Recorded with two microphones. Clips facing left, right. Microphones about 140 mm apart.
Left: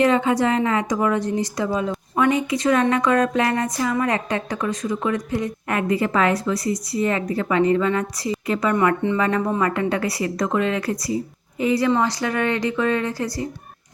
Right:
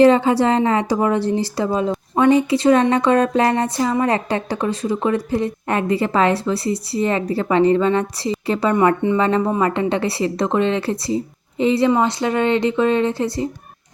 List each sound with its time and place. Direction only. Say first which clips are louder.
0.0 s a woman's voice: right 5 dB; 30° right (ahead or behind)